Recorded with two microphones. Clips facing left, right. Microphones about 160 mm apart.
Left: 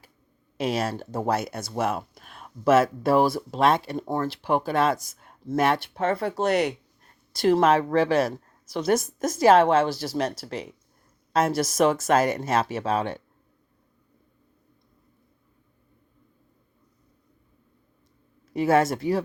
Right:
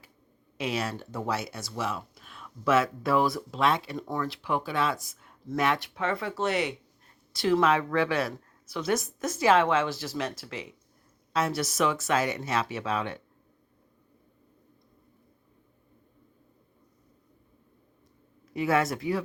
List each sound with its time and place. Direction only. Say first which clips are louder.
0.5 s speech: left 5 dB; 40° left (ahead or behind)
18.5 s speech: left 5 dB; 40° left (ahead or behind)